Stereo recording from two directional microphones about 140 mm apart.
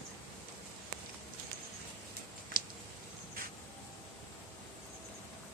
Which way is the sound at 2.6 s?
90° right.